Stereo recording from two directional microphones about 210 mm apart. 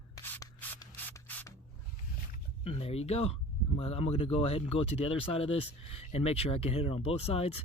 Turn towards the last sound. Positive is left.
turn(degrees=25)  # may be behind; listen again after turning